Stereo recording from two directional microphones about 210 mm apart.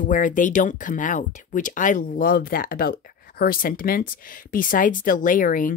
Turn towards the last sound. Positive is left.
turn(degrees=40)  # may be behind; listen again after turning